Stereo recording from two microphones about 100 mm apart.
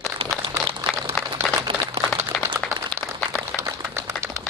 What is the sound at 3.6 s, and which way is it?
Typewriter, 30° right (ahead or behind).